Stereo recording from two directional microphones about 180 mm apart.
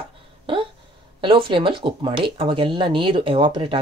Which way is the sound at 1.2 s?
30° right (ahead or behind).